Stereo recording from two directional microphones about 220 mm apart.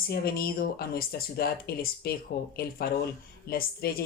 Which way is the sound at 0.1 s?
45° left (ahead or behind).